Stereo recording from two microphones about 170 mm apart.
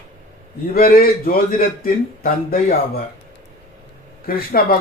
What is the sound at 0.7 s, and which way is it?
A man's voice, 60° left (ahead or behind).